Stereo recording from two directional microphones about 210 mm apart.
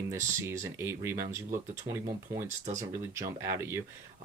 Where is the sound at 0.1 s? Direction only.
15° right (ahead or behind).